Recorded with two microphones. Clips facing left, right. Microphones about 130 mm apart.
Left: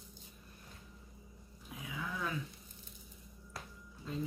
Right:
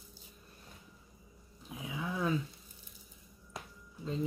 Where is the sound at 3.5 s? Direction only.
20° right (ahead or behind).